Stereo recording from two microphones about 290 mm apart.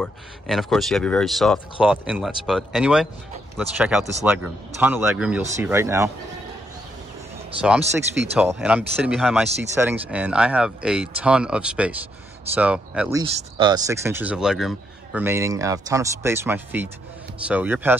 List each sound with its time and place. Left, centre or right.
0.0 s speech: centre
7.9 s speech: centre
13.2 s speech: centre